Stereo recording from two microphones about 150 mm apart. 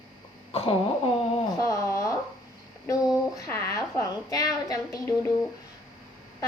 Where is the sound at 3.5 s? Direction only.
15° left (ahead or behind).